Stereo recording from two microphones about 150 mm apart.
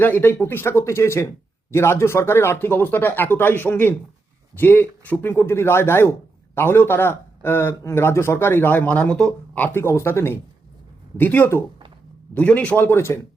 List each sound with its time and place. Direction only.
0.0 s speech: 15° left (ahead or behind)